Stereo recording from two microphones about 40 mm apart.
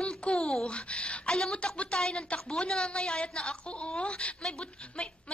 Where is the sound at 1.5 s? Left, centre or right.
Left.